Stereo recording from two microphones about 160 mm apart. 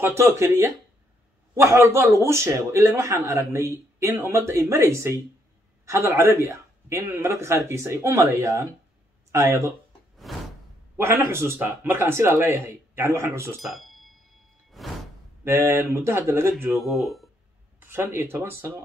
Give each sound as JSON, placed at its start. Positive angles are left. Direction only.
{"t": 0.0, "sound": "speech", "side_deg": -15}
{"t": 10.2, "sound": "a sound", "side_deg": 0}
{"t": 11.0, "sound": "speech", "side_deg": -15}
{"t": 13.6, "sound": "a sound", "side_deg": 0}
{"t": 14.8, "sound": "music", "side_deg": 0}
{"t": 15.4, "sound": "speech", "side_deg": -15}
{"t": 16.7, "sound": "speech", "side_deg": 0}
{"t": 17.7, "sound": "speech", "side_deg": -15}